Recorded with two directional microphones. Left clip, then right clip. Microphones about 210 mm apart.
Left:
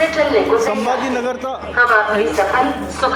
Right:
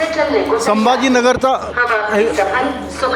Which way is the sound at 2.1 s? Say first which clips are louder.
Right 1 dB; 15° right (ahead or behind).